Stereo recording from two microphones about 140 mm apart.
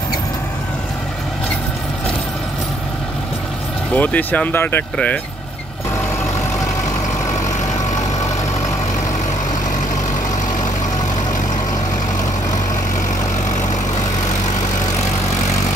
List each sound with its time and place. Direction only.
3.9 s speech: 10° left (ahead or behind)